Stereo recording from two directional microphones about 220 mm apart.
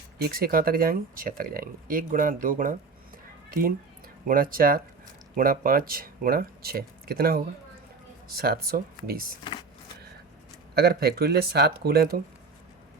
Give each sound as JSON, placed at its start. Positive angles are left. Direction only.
{"t": 0.2, "sound": "speech", "side_deg": -45}
{"t": 4.3, "sound": "speech", "side_deg": -40}
{"t": 9.4, "sound": "power windows", "side_deg": 20}
{"t": 10.8, "sound": "speech", "side_deg": -45}